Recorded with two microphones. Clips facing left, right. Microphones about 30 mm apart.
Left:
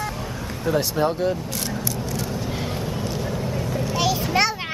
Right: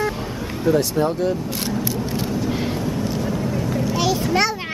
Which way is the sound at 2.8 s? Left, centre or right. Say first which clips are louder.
Right 4 dB; centre.